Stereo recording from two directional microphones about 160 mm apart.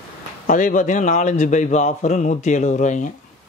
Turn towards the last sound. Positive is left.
turn(degrees=50)  # may be behind; listen again after turning